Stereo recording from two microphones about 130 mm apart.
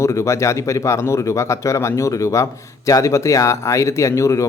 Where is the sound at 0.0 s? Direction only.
25° left (ahead or behind).